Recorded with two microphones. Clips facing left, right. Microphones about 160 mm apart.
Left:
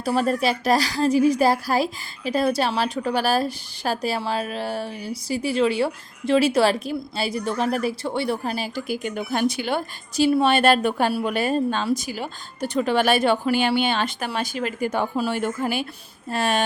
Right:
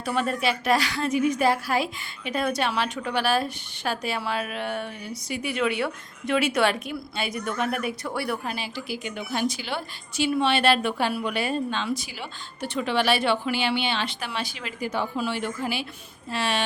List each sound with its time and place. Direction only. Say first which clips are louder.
0.0 s a woman's voice: left 4 dB; 35° left (ahead or behind)
8.4 s speech: left 5 dB; 40° left (ahead or behind)